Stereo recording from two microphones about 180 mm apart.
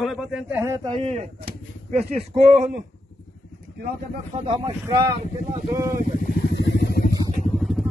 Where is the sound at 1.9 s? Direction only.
35° right (ahead or behind).